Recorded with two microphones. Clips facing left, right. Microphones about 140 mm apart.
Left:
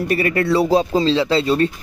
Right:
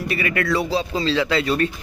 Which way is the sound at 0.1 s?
35° left (ahead or behind).